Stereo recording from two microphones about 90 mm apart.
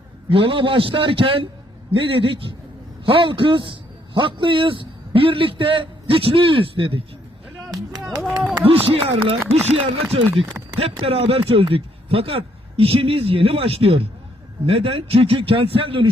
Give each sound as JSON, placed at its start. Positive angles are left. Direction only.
{"t": 0.3, "sound": "a man's voice", "side_deg": -75}
{"t": 7.7, "sound": "a sound", "side_deg": -45}
{"t": 8.6, "sound": "speech", "side_deg": -90}
{"t": 9.7, "sound": "speech", "side_deg": -80}